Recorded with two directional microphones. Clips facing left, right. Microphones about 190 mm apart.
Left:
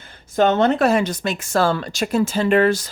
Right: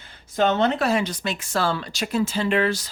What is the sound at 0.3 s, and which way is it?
Speech, 50° left (ahead or behind).